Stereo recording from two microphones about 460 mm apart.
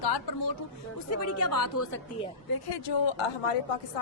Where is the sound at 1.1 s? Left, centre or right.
Left.